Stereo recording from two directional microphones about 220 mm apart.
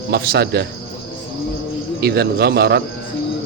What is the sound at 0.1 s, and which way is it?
Speech, 45° right (ahead or behind).